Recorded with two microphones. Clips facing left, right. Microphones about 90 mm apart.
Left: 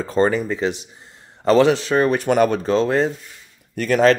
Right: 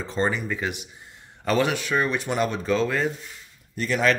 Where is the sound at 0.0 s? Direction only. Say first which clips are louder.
Left 7 dB; 45° left (ahead or behind).